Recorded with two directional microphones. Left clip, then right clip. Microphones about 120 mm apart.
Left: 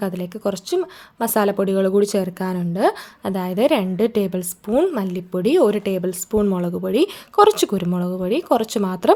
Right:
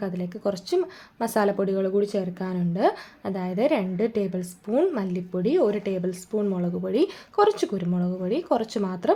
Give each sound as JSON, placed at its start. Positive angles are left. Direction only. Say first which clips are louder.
{"t": 0.0, "sound": "a woman's voice", "louder": "left 5 dB", "side_deg": 40}
{"t": 0.4, "sound": "speech", "louder": "left 3 dB", "side_deg": 25}
{"t": 1.9, "sound": "a woman's voice", "louder": "left 6 dB", "side_deg": 55}
{"t": 7.4, "sound": "speech", "louder": "left 6 dB", "side_deg": 50}